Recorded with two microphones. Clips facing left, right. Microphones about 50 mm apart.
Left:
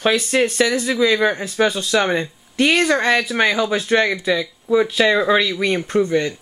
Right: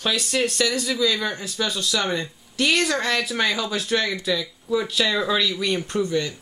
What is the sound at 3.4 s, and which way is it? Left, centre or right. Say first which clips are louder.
Speech: left 6 dB; left.